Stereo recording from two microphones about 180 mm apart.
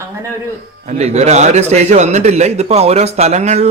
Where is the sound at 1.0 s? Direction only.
35° right (ahead or behind).